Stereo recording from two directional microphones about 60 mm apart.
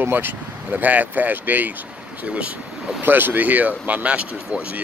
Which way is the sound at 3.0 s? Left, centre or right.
Right.